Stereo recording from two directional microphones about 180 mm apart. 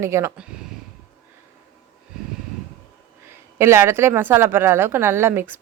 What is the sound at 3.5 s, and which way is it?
Speech, 15° right (ahead or behind).